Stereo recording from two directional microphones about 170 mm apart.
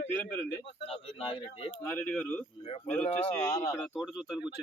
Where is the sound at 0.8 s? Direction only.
35° left (ahead or behind).